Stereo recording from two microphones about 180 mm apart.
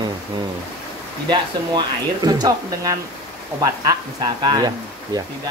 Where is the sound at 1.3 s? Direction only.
25° right (ahead or behind).